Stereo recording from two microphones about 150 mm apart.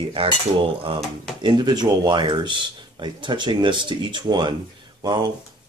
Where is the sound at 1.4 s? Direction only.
25° right (ahead or behind).